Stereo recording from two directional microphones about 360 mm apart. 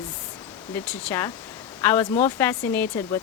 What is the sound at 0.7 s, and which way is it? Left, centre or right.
Speech, centre.